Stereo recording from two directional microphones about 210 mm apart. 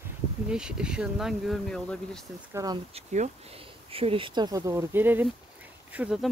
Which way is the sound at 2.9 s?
35° right (ahead or behind).